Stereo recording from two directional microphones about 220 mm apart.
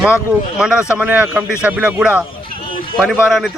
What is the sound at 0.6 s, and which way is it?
Speech, 5° right (ahead or behind).